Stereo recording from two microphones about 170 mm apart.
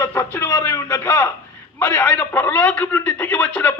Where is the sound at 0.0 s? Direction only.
15° left (ahead or behind).